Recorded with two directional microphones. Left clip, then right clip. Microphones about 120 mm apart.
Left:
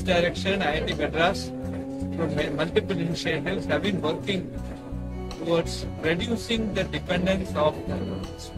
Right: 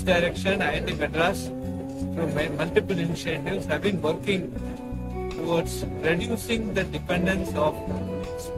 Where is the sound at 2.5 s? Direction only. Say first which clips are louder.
Right 2 dB; 25° right (ahead or behind).